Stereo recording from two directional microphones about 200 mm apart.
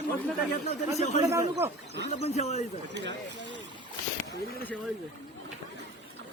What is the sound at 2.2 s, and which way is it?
Speech, 35° left (ahead or behind).